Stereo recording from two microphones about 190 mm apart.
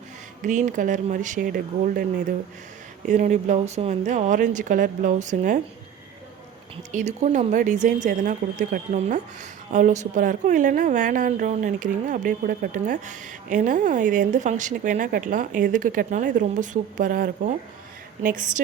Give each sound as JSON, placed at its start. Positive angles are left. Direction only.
{"t": 0.4, "sound": "speech", "side_deg": -40}
{"t": 6.9, "sound": "a woman's voice", "side_deg": -40}